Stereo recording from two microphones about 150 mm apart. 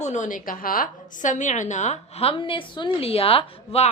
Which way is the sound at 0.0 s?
55° left (ahead or behind).